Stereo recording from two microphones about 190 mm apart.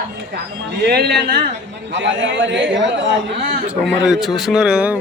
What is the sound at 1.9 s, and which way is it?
A man's voice, 75° right (ahead or behind).